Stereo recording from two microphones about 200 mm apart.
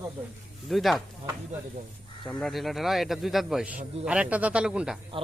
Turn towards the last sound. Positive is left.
turn(degrees=-5)  # may be behind; listen again after turning